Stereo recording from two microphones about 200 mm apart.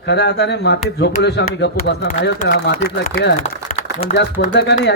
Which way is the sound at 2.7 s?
45° left (ahead or behind).